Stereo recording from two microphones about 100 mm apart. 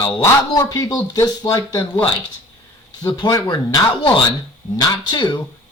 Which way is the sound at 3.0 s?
45° left (ahead or behind).